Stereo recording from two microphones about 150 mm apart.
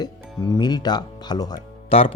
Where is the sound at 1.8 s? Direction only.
40° left (ahead or behind).